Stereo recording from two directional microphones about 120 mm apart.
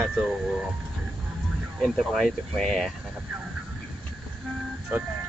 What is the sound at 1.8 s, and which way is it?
Speech, centre (ahead or behind).